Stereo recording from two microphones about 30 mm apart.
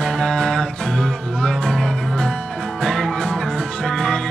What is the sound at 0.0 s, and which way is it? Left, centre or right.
Music, centre.